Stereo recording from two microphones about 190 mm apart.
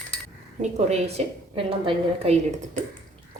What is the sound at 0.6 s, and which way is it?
A woman's voice, 35° right (ahead or behind).